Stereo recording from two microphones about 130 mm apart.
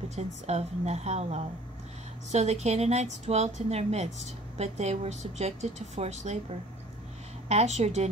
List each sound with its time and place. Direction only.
0.1 s a woman's voice: 55° right (ahead or behind)
7.4 s a woman's voice: 60° right (ahead or behind)